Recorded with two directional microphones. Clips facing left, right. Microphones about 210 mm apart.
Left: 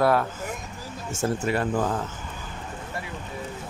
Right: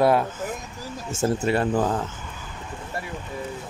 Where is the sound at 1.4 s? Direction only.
30° right (ahead or behind).